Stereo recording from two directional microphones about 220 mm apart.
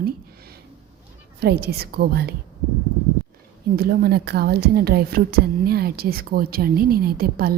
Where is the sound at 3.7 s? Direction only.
45° right (ahead or behind).